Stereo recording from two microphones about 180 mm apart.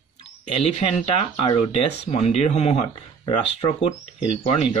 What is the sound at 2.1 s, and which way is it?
Speech, 35° left (ahead or behind).